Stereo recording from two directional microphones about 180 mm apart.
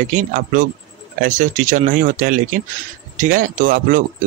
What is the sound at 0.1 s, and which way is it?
Speech, 45° right (ahead or behind).